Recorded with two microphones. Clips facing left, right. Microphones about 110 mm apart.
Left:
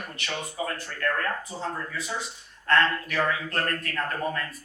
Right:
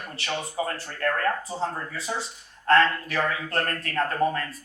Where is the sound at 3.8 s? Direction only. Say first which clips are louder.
Right 5 dB; 35° right (ahead or behind).